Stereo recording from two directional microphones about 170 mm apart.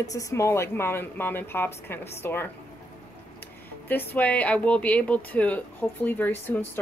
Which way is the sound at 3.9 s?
10° left (ahead or behind).